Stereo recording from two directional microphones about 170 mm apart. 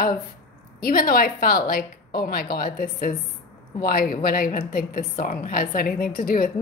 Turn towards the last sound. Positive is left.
turn(degrees=55)  # may be behind; listen again after turning